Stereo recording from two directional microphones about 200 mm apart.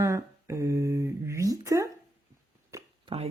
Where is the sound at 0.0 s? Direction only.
15° right (ahead or behind).